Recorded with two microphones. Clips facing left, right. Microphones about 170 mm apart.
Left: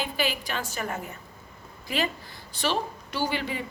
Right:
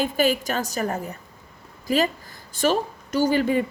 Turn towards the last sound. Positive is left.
turn(degrees=-45)  # may be behind; listen again after turning